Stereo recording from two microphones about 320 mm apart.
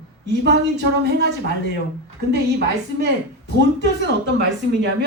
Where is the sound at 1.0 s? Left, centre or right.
Right.